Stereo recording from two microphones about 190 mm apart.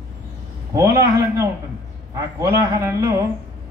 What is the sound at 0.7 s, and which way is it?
A man's voice, 20° right (ahead or behind).